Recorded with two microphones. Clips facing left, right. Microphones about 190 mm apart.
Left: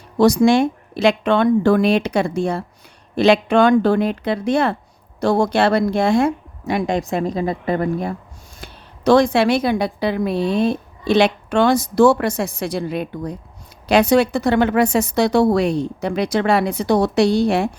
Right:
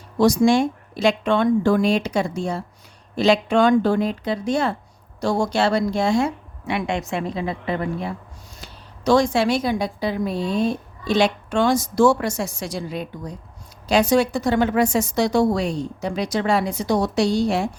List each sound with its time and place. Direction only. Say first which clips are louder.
0.2 s speech: left 3 dB; 65° left (ahead or behind)
6.7 s a woman's voice: left 4 dB; 40° left (ahead or behind)
8.6 s speech: left 4 dB; 60° left (ahead or behind)